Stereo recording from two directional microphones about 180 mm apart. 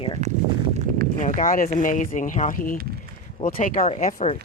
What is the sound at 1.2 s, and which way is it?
Speech, 45° left (ahead or behind).